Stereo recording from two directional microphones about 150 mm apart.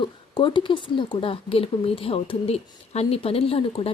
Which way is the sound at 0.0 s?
30° left (ahead or behind).